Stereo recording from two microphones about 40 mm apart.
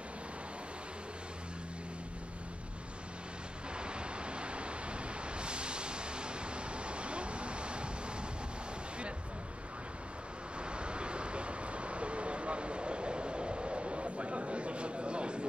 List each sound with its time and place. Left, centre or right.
3.7 s waves: right
5.4 s vehicle: right
10.6 s vehicle: right